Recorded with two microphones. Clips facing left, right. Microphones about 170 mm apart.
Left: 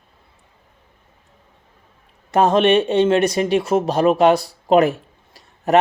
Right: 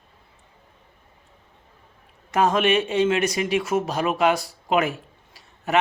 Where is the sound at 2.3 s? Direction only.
35° left (ahead or behind).